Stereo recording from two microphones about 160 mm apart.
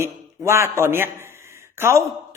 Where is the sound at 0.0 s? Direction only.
15° right (ahead or behind).